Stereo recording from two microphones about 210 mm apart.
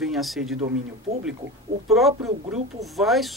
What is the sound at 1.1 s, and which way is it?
Speech, 30° right (ahead or behind).